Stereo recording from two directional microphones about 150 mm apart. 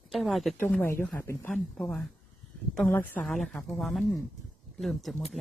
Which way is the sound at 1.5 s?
5° left (ahead or behind).